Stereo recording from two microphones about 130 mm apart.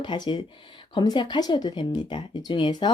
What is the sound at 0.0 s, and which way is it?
Speech, 35° left (ahead or behind).